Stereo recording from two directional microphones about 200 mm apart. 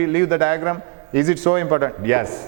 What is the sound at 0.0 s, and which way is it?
A man's voice, 15° right (ahead or behind).